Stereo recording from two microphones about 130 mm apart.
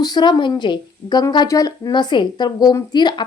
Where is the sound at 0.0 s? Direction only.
35° left (ahead or behind).